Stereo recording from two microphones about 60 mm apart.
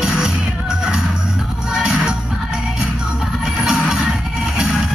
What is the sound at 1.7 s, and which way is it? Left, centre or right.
Music, centre.